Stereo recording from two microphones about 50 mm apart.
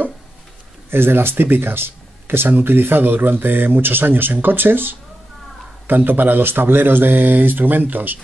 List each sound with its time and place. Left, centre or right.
0.8 s speech: right